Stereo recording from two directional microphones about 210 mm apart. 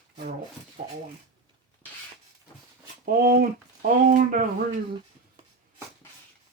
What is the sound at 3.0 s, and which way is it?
Speech, 45° right (ahead or behind).